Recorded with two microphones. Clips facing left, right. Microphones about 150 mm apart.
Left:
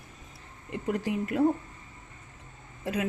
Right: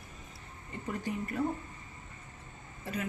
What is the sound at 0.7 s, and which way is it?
Speech, 90° left.